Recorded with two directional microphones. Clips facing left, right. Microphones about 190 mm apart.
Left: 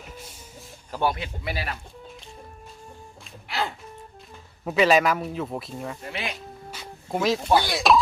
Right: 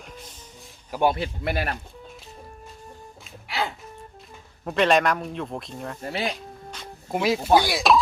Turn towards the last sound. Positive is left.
turn(degrees=0)  # may be behind; listen again after turning